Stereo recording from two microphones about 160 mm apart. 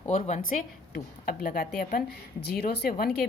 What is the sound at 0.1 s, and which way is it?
A woman's voice, 50° left (ahead or behind).